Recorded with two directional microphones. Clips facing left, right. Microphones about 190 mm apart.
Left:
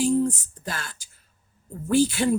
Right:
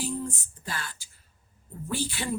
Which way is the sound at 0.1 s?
45° left (ahead or behind).